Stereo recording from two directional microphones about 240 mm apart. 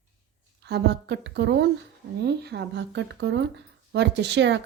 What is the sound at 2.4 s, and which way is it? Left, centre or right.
A woman's voice, right.